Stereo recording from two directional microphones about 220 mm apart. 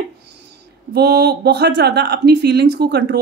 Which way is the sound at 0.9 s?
45° right (ahead or behind).